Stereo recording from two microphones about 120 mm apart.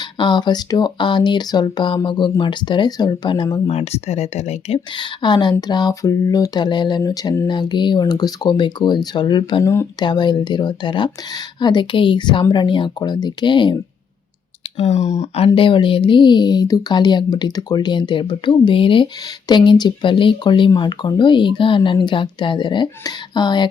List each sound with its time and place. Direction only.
0.0 s speech: 40° left (ahead or behind)
3.7 s speech: 60° left (ahead or behind)
4.9 s speech: 40° left (ahead or behind)
14.8 s speech: 65° left (ahead or behind)
15.5 s speech: 45° left (ahead or behind)